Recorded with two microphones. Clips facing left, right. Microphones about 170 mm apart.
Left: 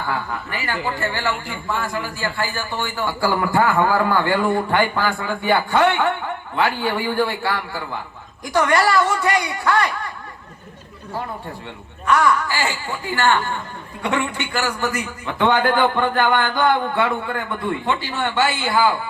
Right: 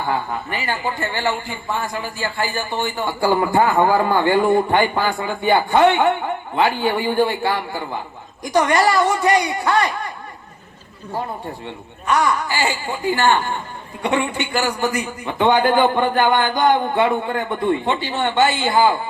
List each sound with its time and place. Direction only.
0.0 s a man's voice: 20° right (ahead or behind)
12.0 s a man's voice: 20° right (ahead or behind)